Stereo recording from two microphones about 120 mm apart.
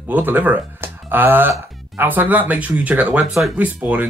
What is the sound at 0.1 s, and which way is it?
Speech, 15° right (ahead or behind).